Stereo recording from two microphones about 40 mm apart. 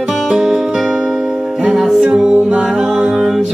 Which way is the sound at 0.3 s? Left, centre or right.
Centre.